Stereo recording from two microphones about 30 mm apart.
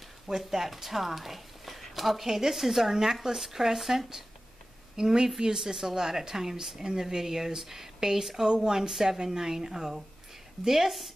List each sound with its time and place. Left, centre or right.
0.5 s speech: centre
4.9 s a woman's voice: right
9.2 s a woman's voice: right